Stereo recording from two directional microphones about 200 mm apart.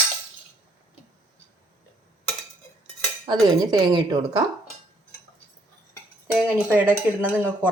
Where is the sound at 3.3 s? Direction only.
20° right (ahead or behind).